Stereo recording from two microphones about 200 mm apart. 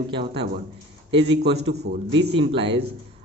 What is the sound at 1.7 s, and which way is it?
Speech, 55° right (ahead or behind).